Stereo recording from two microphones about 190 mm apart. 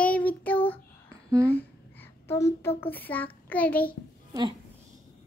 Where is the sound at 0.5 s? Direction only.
30° left (ahead or behind).